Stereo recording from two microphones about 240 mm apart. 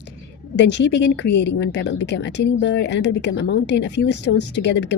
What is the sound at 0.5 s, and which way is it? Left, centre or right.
A woman's voice, left.